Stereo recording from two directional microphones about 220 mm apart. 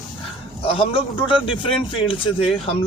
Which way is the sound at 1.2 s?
25° left (ahead or behind).